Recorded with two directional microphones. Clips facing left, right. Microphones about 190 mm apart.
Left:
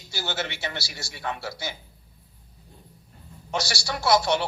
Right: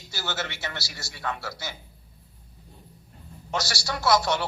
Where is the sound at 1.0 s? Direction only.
25° left (ahead or behind).